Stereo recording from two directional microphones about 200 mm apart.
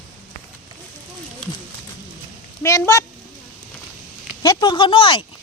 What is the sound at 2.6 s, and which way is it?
Speech, 15° left (ahead or behind).